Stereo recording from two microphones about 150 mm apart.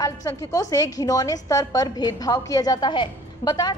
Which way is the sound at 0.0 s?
25° left (ahead or behind).